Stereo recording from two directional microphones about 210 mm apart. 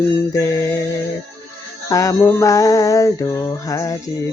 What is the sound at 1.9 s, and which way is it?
Female singing, 15° left (ahead or behind).